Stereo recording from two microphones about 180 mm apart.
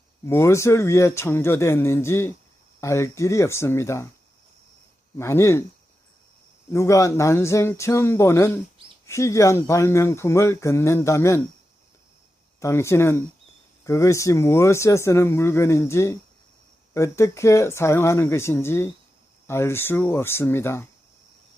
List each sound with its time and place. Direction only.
0.3 s speech: 15° left (ahead or behind)
5.1 s speech: 15° left (ahead or behind)
6.7 s speech: 15° left (ahead or behind)
12.5 s speech: 15° left (ahead or behind)